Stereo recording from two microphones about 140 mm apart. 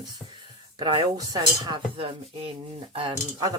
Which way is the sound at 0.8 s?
35° right (ahead or behind).